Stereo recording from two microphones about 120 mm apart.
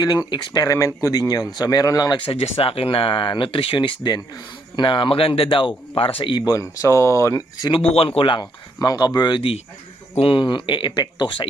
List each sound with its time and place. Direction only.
0.0 s speech: 35° left (ahead or behind)
6.4 s speech: 30° left (ahead or behind)
7.7 s speech: 50° left (ahead or behind)